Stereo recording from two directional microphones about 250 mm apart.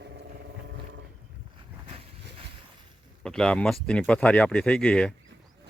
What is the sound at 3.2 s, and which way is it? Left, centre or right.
Speech, centre.